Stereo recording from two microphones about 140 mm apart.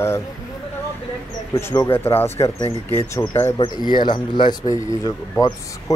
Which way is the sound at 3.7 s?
30° left (ahead or behind).